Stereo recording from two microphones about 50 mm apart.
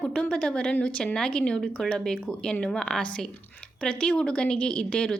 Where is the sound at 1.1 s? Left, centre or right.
Centre.